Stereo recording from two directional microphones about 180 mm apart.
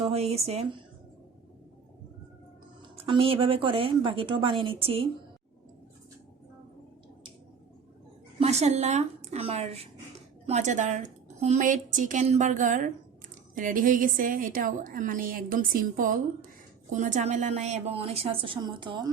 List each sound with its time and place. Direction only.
0.0 s speech: 35° right (ahead or behind)
2.9 s a woman's voice: 30° right (ahead or behind)
8.4 s a woman's voice: 35° right (ahead or behind)